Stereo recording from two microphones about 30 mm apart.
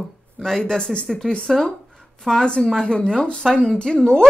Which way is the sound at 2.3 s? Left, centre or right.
Centre.